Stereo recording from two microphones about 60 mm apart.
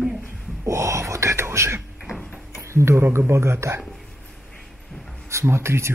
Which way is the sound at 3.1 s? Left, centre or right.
Right.